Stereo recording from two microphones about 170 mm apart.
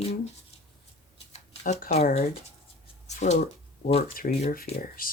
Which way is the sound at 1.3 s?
45° left (ahead or behind).